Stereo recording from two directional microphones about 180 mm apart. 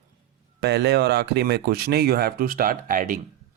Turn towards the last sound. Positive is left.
turn(degrees=-50)  # may be behind; listen again after turning